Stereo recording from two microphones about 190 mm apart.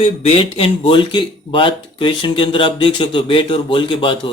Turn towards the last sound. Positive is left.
turn(degrees=25)  # may be behind; listen again after turning